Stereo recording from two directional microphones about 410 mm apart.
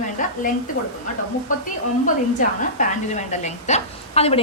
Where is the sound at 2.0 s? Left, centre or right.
Centre.